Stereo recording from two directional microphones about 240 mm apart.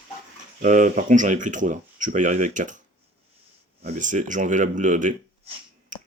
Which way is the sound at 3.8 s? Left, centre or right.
Right.